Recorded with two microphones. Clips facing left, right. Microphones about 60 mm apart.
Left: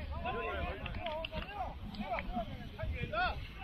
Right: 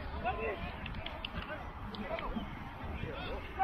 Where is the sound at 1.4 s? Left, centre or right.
Right.